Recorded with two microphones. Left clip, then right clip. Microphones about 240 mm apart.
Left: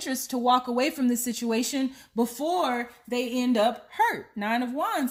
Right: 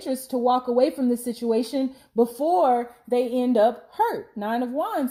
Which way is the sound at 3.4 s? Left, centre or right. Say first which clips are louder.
Right 1 dB; left.